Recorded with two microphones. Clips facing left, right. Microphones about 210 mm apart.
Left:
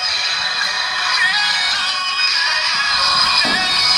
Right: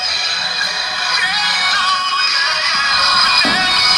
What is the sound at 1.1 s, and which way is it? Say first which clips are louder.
Music: right 3 dB; 55° right (ahead or behind).